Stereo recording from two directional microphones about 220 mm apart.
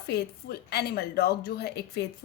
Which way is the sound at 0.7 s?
45° left (ahead or behind).